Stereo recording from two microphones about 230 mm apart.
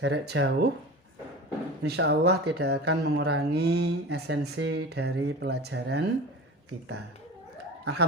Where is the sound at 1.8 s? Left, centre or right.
Right.